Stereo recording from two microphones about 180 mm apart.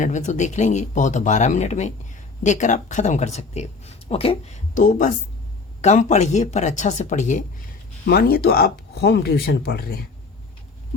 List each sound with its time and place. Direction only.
0.0 s speech: 40° left (ahead or behind)
8.0 s speech: 60° left (ahead or behind)